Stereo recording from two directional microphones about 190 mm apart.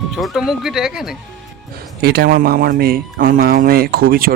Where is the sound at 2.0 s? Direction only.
55° right (ahead or behind).